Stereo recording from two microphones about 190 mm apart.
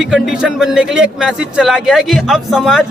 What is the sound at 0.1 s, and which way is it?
Speech, 5° right (ahead or behind).